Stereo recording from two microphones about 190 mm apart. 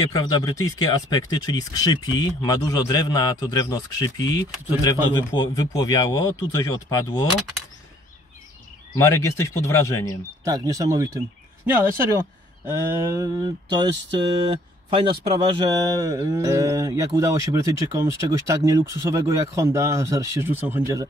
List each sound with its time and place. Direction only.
0.1 s speech: 20° left (ahead or behind)
8.9 s speech: 15° left (ahead or behind)
10.4 s speech: 20° right (ahead or behind)
12.6 s a sound: 15° right (ahead or behind)